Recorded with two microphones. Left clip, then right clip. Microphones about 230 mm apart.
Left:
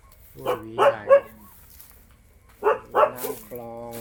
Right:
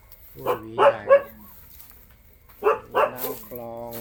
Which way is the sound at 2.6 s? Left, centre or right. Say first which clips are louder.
Even; centre.